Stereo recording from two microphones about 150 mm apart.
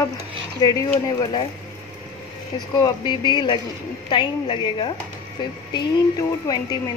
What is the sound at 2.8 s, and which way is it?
Speech, 30° left (ahead or behind).